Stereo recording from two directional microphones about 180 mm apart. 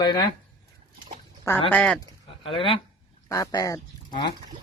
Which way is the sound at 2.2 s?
30° left (ahead or behind).